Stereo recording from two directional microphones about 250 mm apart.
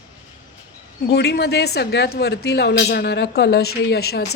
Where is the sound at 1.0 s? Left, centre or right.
Left.